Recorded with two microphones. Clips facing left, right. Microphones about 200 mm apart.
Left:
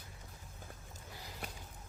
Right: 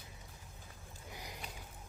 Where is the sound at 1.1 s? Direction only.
15° right (ahead or behind).